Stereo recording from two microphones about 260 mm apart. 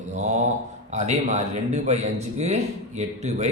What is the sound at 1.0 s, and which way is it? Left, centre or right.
A man's voice, right.